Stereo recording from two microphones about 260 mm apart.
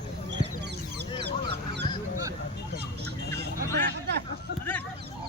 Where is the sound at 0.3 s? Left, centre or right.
Right.